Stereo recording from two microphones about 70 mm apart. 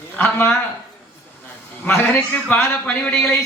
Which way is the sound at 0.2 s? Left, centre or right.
Left.